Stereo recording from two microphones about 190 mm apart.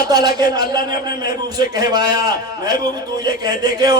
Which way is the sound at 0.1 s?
20° right (ahead or behind).